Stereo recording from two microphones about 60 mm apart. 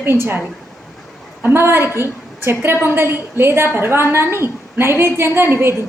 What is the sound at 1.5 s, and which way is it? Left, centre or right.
A woman's voice, right.